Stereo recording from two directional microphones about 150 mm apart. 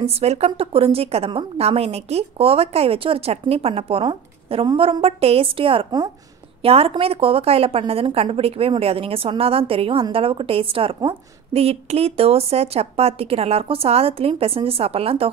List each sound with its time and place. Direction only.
0.0 s a woman's voice: 45° right (ahead or behind)